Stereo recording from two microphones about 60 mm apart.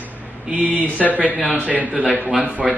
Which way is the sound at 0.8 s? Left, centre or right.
Left.